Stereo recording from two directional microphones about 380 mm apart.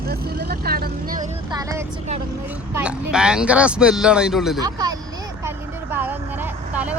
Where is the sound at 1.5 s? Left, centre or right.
Centre.